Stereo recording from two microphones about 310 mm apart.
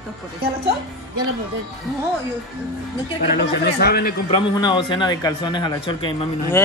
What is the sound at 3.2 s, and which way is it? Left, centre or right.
Speech, left.